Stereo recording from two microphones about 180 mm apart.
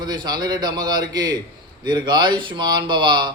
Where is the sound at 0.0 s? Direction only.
25° right (ahead or behind).